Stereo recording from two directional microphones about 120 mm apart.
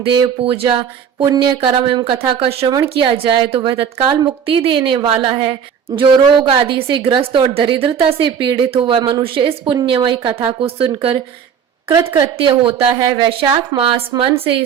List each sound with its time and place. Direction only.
0.0 s a woman's voice: 45° right (ahead or behind)
1.2 s a woman's voice: 40° right (ahead or behind); by 2.6 s 55° right (ahead or behind)
3.0 s a woman's voice: 45° right (ahead or behind)
11.9 s a woman's voice: 30° right (ahead or behind)
12.6 s a woman's voice: 45° right (ahead or behind)
13.0 s a woman's voice: 30° right (ahead or behind); by 14.5 s 50° right (ahead or behind)